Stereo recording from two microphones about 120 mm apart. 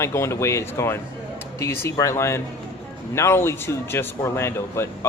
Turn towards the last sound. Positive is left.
turn(degrees=20)  # may be behind; listen again after turning